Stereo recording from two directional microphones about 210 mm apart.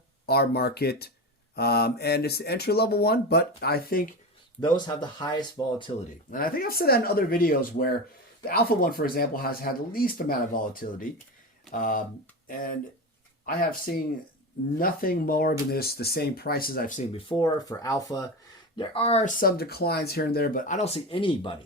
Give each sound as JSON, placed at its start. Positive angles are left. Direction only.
{"t": 0.3, "sound": "speech", "side_deg": 50}
{"t": 4.6, "sound": "speech", "side_deg": 20}
{"t": 6.3, "sound": "speech", "side_deg": 45}
{"t": 17.4, "sound": "speech", "side_deg": 15}
{"t": 18.8, "sound": "speech", "side_deg": 30}